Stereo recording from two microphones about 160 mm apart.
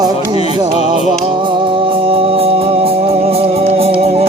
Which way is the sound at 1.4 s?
30° right (ahead or behind).